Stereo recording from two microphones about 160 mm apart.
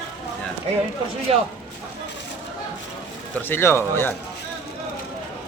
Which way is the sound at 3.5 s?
15° left (ahead or behind).